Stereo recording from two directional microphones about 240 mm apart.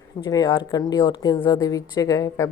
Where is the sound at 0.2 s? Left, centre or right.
Centre.